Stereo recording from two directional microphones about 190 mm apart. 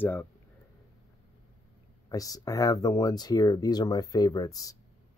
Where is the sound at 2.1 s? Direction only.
20° left (ahead or behind).